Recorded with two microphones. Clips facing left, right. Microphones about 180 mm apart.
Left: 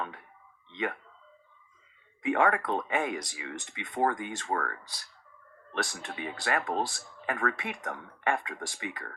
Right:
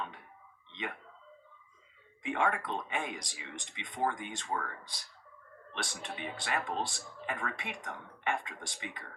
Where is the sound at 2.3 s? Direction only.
70° left (ahead or behind).